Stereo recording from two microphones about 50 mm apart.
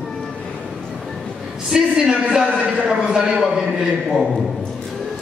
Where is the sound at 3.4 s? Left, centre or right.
Centre.